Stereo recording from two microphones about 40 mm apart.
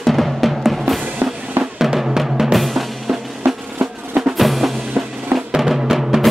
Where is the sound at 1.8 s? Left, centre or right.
Centre.